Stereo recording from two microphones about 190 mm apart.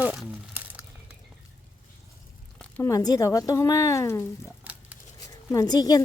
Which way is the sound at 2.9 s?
20° left (ahead or behind).